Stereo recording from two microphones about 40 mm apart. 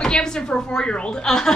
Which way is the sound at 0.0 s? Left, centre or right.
Centre.